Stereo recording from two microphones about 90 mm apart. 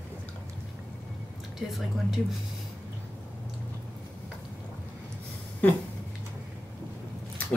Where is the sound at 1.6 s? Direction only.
Centre (ahead or behind).